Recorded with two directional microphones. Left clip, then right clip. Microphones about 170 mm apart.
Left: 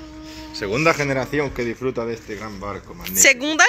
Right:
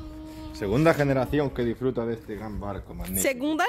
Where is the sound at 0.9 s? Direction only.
35° right (ahead or behind).